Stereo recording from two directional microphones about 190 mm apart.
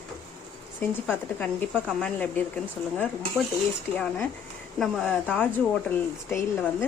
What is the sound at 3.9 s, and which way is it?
Speech, 5° left (ahead or behind).